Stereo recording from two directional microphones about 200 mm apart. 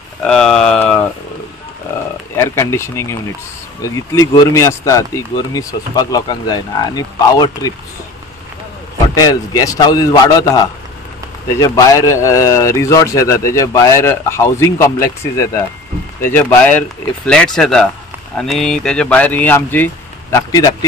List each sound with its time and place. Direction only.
0.2 s a sound: 5° left (ahead or behind)
2.3 s a man's voice: 10° left (ahead or behind)
9.1 s a man's voice: 20° left (ahead or behind)
11.6 s a man's voice: 15° left (ahead or behind)